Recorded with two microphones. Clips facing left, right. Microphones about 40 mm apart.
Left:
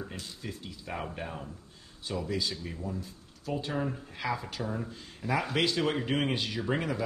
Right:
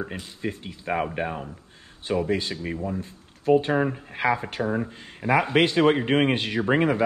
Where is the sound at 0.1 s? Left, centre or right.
Right.